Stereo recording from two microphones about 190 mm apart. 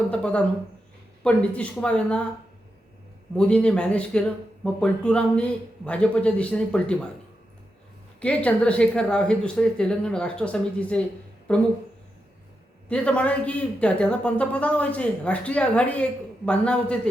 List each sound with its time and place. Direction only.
0.1 s speech: 5° left (ahead or behind)
3.3 s speech: 5° left (ahead or behind)
8.2 s speech: 5° left (ahead or behind)
12.9 s speech: 5° left (ahead or behind)